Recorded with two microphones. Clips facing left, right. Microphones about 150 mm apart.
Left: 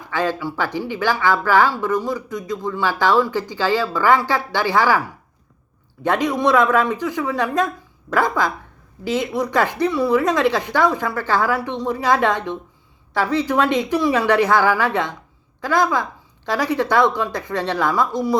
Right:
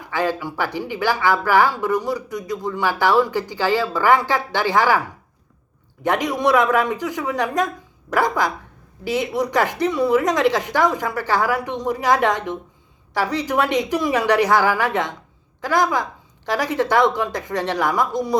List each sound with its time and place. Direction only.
0.0 s speech: 15° right (ahead or behind)
6.0 s speech: 15° right (ahead or behind)
13.3 s speech: 15° right (ahead or behind)